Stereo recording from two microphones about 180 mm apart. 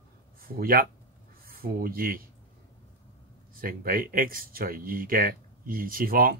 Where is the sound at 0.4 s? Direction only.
55° right (ahead or behind).